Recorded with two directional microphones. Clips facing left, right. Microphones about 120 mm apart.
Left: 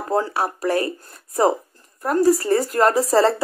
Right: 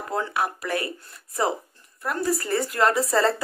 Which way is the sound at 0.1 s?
35° left (ahead or behind).